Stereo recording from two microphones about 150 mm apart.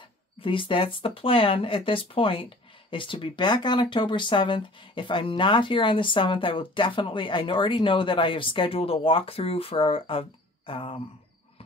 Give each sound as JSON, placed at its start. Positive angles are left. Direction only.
{"t": 0.4, "sound": "speech", "side_deg": 35}